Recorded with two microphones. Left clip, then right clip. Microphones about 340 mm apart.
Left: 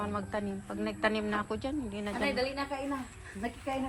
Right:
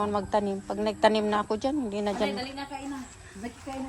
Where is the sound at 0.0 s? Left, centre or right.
Centre.